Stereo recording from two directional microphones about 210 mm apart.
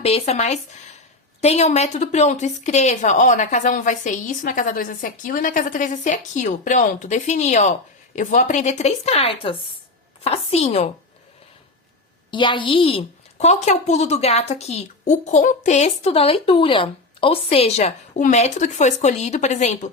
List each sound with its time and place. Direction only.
0.0 s a woman's voice: 30° left (ahead or behind)
12.3 s a woman's voice: 20° left (ahead or behind)